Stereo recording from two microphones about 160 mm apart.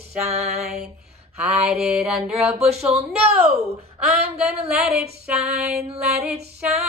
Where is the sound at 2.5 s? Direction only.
40° right (ahead or behind).